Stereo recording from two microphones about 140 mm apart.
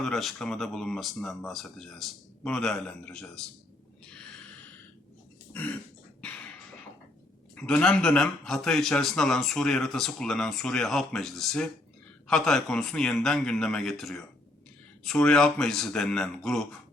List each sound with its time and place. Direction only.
0.0 s a man's voice: centre (ahead or behind)
5.5 s throat clearing: 10° left (ahead or behind)
7.5 s a man's voice: 10° left (ahead or behind)